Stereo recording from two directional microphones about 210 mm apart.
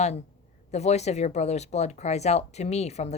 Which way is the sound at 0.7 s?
30° left (ahead or behind).